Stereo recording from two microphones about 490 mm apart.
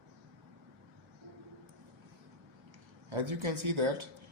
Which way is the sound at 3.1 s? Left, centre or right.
Right.